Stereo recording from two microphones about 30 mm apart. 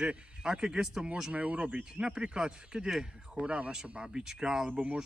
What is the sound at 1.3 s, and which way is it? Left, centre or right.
Speech, right.